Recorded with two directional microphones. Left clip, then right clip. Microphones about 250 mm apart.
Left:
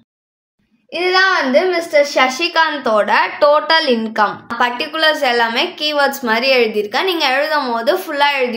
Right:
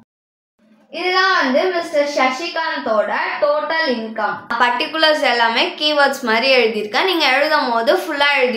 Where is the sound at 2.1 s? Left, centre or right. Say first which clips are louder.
Left 4 dB; left.